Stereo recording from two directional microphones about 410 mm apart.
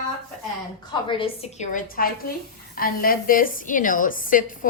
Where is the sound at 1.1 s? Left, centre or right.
Centre.